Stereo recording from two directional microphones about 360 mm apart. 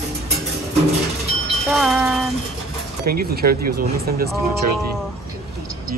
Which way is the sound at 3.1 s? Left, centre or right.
Right.